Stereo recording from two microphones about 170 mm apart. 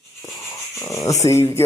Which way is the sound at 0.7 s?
15° left (ahead or behind).